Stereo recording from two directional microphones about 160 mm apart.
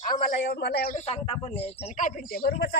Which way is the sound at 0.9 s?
40° left (ahead or behind).